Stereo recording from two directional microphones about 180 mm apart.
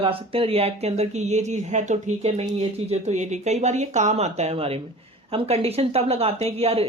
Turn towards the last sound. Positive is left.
turn(degrees=-35)  # may be behind; listen again after turning